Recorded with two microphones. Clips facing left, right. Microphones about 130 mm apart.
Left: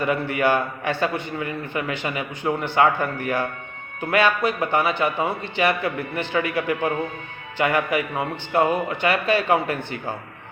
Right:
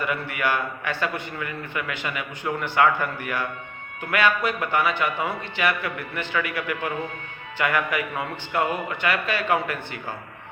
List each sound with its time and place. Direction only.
0.0 s a man's voice: 30° left (ahead or behind)